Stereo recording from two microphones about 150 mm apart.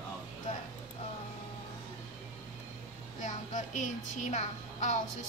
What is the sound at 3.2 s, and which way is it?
Speech, 55° left (ahead or behind).